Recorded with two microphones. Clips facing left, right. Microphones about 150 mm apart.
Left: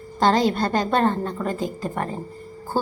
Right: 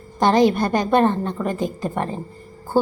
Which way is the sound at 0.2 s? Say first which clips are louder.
Right 3 dB; 15° right (ahead or behind).